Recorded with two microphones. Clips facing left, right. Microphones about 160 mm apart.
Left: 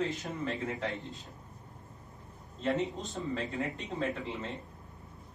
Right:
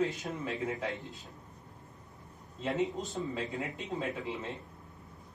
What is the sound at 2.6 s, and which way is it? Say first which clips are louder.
Speech: even; 5° right (ahead or behind).